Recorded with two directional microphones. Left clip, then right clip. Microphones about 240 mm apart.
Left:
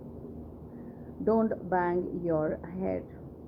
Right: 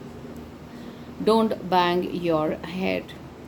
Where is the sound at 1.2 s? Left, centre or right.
Right.